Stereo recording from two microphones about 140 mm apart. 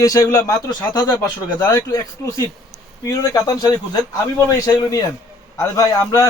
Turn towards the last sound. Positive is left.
turn(degrees=25)  # may be behind; listen again after turning